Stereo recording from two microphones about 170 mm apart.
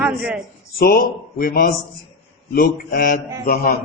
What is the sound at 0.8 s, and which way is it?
Speech, 60° left (ahead or behind).